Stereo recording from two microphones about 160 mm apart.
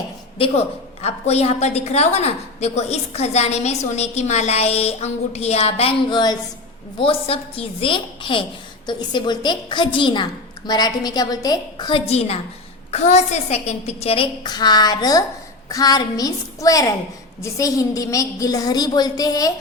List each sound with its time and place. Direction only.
0.3 s a woman's voice: 35° left (ahead or behind)